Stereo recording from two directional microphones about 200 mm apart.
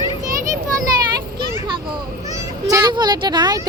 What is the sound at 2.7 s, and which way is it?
A woman's voice, 20° right (ahead or behind).